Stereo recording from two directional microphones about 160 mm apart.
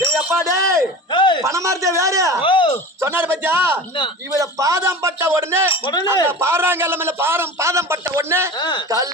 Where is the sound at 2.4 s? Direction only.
35° left (ahead or behind).